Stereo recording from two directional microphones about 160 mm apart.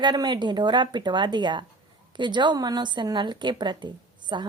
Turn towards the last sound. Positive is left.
turn(degrees=-30)  # may be behind; listen again after turning